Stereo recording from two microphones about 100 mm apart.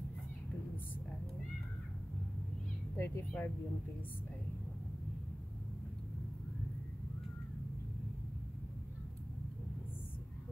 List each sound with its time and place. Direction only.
3.0 s speech: 20° left (ahead or behind)